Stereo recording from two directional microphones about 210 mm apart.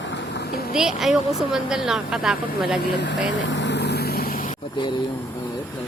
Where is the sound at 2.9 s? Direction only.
55° left (ahead or behind).